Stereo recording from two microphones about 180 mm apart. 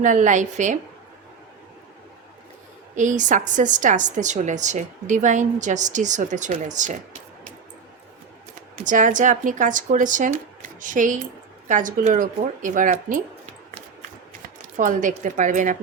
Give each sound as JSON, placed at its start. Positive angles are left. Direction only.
{"t": 0.0, "sound": "a woman's voice", "side_deg": -45}
{"t": 2.9, "sound": "a woman's voice", "side_deg": -45}
{"t": 8.7, "sound": "a woman's voice", "side_deg": -45}